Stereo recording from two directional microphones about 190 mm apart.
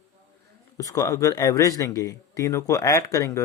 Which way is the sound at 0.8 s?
20° left (ahead or behind).